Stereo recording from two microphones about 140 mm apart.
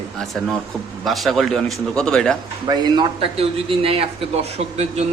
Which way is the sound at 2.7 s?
30° right (ahead or behind).